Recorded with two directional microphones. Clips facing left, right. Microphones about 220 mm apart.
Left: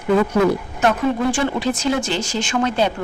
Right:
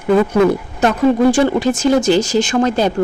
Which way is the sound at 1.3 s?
45° right (ahead or behind).